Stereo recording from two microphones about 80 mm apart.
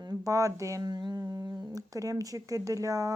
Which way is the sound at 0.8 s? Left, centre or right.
Right.